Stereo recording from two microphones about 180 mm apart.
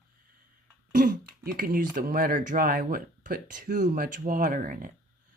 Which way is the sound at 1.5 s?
55° right (ahead or behind).